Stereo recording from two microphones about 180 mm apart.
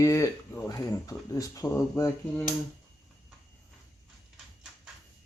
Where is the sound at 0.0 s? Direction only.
15° left (ahead or behind).